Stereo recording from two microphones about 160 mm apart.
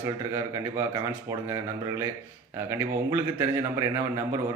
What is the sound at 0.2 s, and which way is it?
Speech, 15° right (ahead or behind).